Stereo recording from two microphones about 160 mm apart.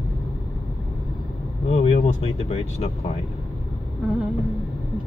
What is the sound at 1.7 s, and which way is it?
Speech, 40° left (ahead or behind).